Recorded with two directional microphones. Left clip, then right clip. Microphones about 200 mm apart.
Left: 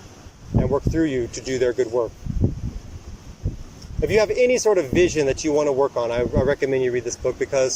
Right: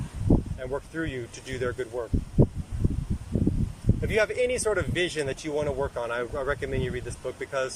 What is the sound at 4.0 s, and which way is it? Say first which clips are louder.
Speech: left 7 dB; 25° left (ahead or behind).